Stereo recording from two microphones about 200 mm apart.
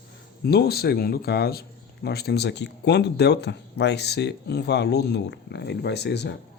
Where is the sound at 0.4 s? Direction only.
50° left (ahead or behind).